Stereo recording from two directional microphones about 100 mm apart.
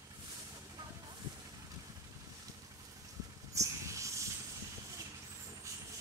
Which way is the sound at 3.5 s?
30° right (ahead or behind).